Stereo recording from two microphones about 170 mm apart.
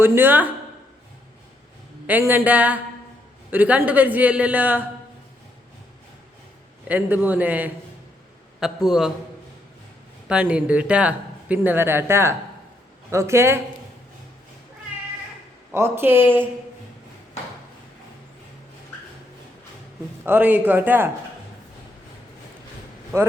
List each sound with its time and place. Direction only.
0.0 s speech: 15° right (ahead or behind)
2.0 s speech: 10° right (ahead or behind)
6.8 s a man's voice: 10° right (ahead or behind)
10.2 s speech: 5° right (ahead or behind)
15.7 s speech: 15° right (ahead or behind)
20.2 s speech: 10° right (ahead or behind)
23.1 s speech: 15° right (ahead or behind)